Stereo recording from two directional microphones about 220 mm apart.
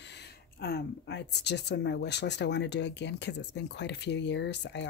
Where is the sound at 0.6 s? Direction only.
45° left (ahead or behind).